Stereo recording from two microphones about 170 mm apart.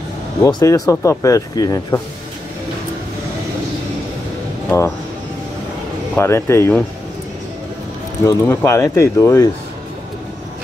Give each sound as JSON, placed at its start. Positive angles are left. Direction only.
{"t": 0.4, "sound": "speech", "side_deg": 20}
{"t": 4.6, "sound": "speech", "side_deg": 15}
{"t": 6.1, "sound": "speech", "side_deg": 15}
{"t": 8.3, "sound": "speech", "side_deg": 15}